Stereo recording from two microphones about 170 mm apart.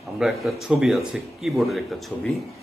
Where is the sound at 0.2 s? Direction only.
Centre (ahead or behind).